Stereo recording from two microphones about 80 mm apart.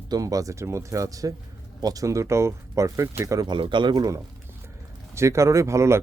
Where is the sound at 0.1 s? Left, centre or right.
Right.